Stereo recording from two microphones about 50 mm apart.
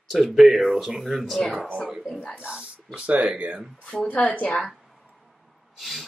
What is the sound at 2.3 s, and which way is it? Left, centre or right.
Speech, right.